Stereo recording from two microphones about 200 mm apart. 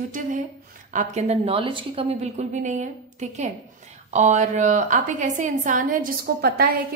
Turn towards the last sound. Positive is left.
turn(degrees=-45)  # may be behind; listen again after turning